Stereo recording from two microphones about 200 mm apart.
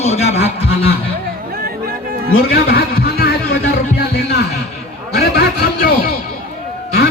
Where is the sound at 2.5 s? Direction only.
50° left (ahead or behind).